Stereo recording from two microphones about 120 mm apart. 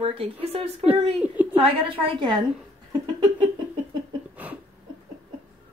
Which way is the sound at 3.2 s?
40° right (ahead or behind).